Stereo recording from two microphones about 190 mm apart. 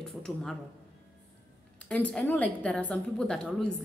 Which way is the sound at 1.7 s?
5° left (ahead or behind).